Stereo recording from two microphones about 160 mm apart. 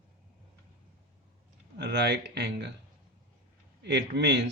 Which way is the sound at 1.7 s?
90° right.